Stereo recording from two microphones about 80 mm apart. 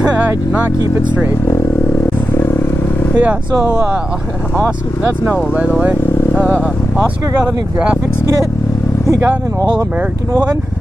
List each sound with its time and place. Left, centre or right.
0.0 s vehicle: centre
3.2 s speech: centre